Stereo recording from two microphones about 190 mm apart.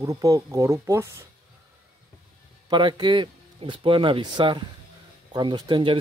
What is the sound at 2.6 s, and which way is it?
Speech, 25° right (ahead or behind).